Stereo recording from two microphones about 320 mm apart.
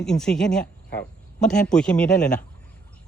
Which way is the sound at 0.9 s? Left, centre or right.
Left.